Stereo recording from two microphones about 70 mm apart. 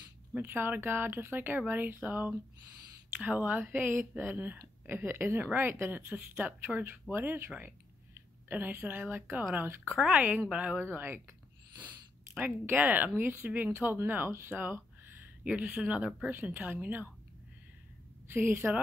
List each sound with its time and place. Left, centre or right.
0.4 s a woman's voice: right
10.5 s speech: centre
10.8 s speech: right
12.6 s speech: right
15.4 s speech: centre
16.3 s speech: right
18.3 s speech: right